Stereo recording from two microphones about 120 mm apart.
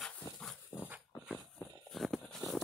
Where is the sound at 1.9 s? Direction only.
Centre (ahead or behind).